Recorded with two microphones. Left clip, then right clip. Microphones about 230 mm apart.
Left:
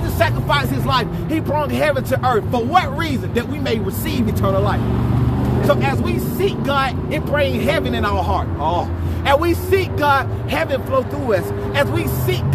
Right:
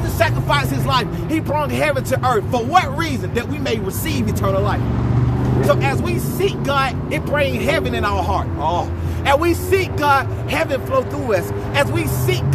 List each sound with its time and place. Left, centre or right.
0.2 s speech: centre